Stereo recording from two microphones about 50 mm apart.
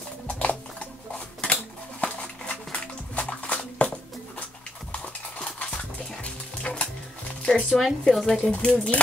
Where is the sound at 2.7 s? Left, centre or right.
Left.